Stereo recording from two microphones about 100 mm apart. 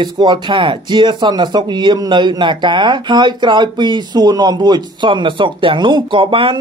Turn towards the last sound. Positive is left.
turn(degrees=-65)  # may be behind; listen again after turning